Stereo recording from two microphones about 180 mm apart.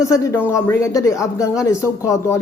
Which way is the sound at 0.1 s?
15° left (ahead or behind).